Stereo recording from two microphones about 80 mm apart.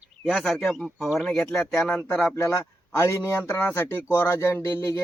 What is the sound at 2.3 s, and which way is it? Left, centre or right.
Speech, left.